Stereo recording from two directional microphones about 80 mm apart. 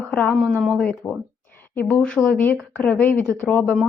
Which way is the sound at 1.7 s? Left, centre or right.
Left.